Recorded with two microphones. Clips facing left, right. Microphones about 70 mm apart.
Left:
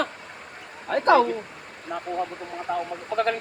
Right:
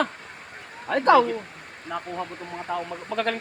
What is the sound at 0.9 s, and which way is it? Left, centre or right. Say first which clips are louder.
Speech: right 1 dB; right.